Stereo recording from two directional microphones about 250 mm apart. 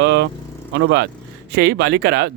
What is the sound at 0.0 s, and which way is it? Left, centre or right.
Vehicle, right.